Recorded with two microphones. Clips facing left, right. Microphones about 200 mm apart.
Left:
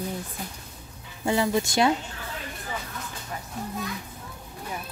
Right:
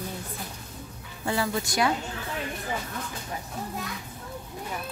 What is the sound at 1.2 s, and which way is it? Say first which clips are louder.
Speech: left 4 dB; 20° left (ahead or behind).